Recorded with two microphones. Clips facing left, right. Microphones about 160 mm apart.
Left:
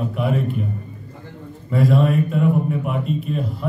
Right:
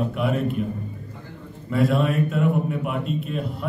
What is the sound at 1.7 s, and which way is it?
Speech, centre (ahead or behind).